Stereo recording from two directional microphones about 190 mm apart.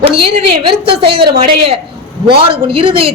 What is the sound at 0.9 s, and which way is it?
Speech, 60° right (ahead or behind).